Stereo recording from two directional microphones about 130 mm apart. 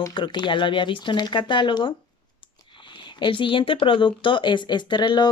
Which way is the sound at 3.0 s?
40° left (ahead or behind).